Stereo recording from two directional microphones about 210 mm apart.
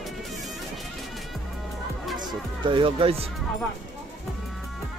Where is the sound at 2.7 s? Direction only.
25° right (ahead or behind).